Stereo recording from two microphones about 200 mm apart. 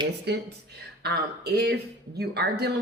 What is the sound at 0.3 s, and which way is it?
Speech, 55° right (ahead or behind).